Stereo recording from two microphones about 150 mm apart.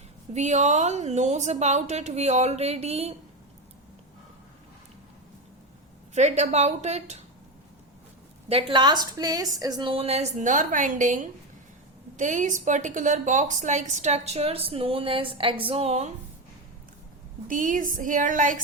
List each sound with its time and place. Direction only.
0.3 s a woman's voice: 50° right (ahead or behind)
6.1 s a woman's voice: 50° right (ahead or behind)
8.4 s a woman's voice: 40° right (ahead or behind)
17.5 s a woman's voice: 65° right (ahead or behind)